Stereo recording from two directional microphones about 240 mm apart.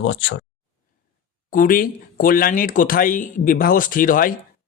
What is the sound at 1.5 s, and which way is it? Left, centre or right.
Speech, left.